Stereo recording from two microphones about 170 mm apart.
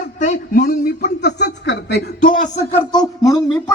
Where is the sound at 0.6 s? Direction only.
60° left (ahead or behind); by 3.0 s 25° left (ahead or behind).